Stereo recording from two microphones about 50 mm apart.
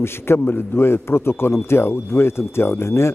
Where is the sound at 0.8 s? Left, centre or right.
Left.